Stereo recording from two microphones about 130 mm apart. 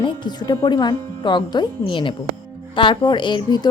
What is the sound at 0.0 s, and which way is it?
Speech, 30° left (ahead or behind).